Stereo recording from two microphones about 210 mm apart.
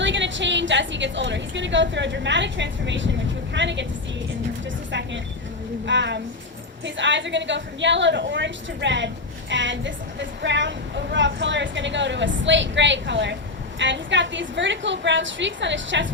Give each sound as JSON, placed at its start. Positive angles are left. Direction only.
{"t": 0.0, "sound": "a woman's voice", "side_deg": -60}
{"t": 4.9, "sound": "a woman's voice", "side_deg": -60}